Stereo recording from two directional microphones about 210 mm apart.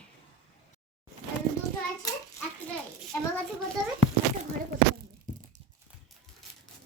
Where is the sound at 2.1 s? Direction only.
15° left (ahead or behind).